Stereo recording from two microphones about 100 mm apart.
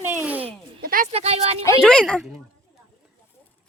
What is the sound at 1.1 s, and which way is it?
Speech, 90° right.